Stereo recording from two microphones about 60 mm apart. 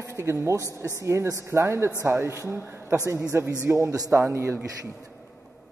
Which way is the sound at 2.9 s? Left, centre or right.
Right.